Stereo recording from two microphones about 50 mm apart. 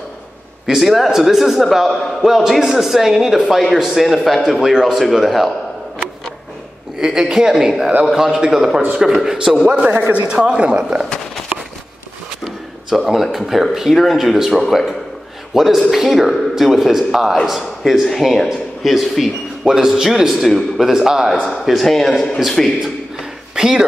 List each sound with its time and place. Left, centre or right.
0.7 s a man's voice: centre
7.0 s speech: centre
10.1 s speech: right
13.0 s a man's voice: centre
19.6 s speech: centre
21.6 s a man's voice: centre
23.1 s a sound: centre